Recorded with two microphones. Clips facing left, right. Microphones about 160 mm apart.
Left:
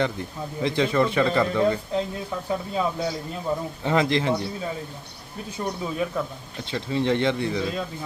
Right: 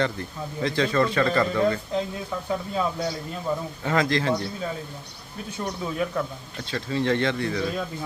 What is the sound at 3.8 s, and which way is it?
Speech, 20° left (ahead or behind).